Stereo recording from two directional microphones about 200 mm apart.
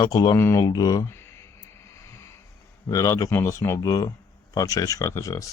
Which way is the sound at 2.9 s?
15° left (ahead or behind).